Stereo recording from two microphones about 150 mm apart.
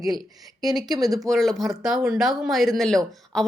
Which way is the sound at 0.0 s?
25° right (ahead or behind).